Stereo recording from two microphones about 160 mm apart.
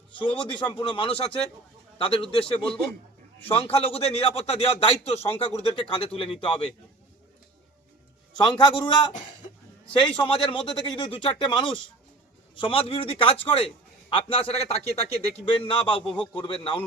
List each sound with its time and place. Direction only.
0.2 s a man's voice: 30° left (ahead or behind)
3.4 s a man's voice: 35° left (ahead or behind)
8.4 s a man's voice: 30° left (ahead or behind)